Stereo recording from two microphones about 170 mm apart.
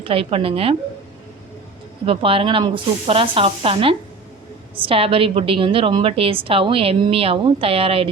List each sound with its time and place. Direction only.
0.0 s a woman's voice: 35° right (ahead or behind)
2.0 s a woman's voice: 35° right (ahead or behind)